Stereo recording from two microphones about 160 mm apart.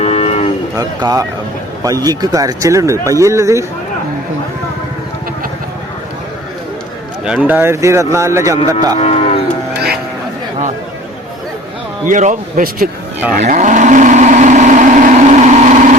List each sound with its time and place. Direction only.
0.0 s vehicle: 40° left (ahead or behind)
0.8 s speech: 20° right (ahead or behind)
7.3 s speech: 10° right (ahead or behind); by 9.0 s 25° right (ahead or behind)
9.0 s cattle: 40° left (ahead or behind)
9.7 s music: 80° right
12.0 s speech: 50° right (ahead or behind)
13.6 s vehicle: 50° right (ahead or behind)